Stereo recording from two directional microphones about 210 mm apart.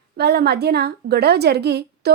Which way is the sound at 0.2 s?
50° right (ahead or behind).